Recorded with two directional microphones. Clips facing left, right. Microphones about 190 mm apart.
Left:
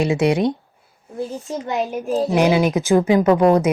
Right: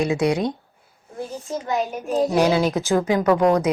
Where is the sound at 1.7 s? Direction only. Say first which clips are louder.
Left 2 dB; centre (ahead or behind).